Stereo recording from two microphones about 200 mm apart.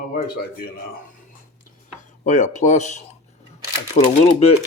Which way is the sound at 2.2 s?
35° left (ahead or behind).